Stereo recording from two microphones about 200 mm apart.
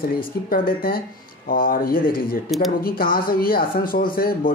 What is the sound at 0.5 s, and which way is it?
Speech, 45° left (ahead or behind).